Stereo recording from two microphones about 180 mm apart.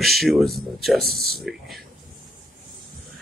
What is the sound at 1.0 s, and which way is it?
Speech, 60° right (ahead or behind).